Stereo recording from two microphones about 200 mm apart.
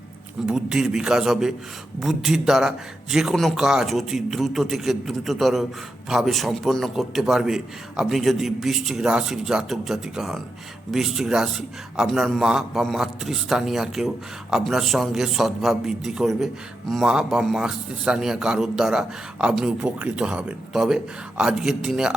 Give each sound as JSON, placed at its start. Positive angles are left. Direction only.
{"t": 0.4, "sound": "a man's voice", "side_deg": -5}